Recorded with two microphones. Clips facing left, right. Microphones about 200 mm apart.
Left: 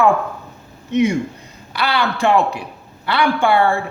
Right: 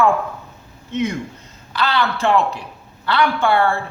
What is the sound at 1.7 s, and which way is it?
A man's voice, 15° left (ahead or behind).